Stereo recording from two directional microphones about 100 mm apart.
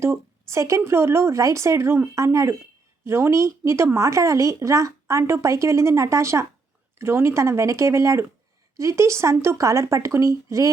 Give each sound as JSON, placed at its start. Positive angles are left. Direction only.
{"t": 0.0, "sound": "a woman's voice", "side_deg": -30}